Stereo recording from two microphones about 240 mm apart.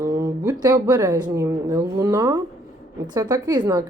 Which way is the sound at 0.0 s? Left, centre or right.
Centre.